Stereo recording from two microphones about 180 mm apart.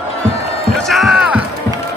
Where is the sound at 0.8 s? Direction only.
Centre (ahead or behind).